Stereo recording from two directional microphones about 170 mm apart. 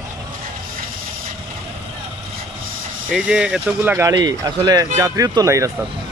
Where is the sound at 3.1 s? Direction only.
5° right (ahead or behind).